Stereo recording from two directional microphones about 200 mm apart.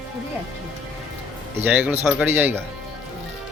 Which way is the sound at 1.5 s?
10° right (ahead or behind).